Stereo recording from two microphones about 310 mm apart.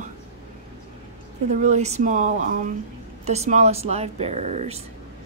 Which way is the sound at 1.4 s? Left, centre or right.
Right.